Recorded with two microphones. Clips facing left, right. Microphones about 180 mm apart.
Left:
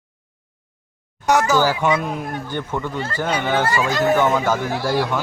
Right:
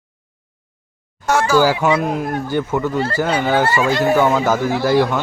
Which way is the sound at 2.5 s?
10° right (ahead or behind).